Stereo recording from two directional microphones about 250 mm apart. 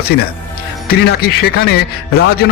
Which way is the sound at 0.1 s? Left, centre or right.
Left.